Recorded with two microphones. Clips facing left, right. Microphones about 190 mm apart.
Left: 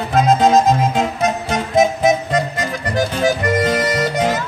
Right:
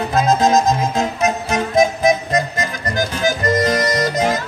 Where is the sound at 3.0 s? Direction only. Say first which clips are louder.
Left 2 dB; 30° left (ahead or behind).